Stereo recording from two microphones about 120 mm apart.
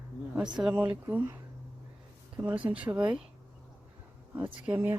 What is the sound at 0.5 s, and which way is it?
Speech, 5° right (ahead or behind).